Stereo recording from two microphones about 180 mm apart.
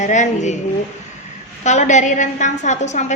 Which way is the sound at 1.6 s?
40° left (ahead or behind).